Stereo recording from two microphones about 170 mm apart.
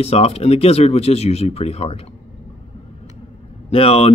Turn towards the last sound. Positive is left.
turn(degrees=35)  # may be behind; listen again after turning